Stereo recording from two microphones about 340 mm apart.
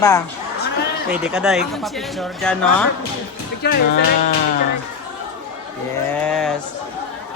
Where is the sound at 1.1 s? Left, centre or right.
Centre.